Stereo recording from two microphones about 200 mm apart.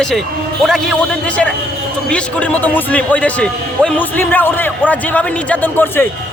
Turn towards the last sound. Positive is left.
turn(degrees=10)  # may be behind; listen again after turning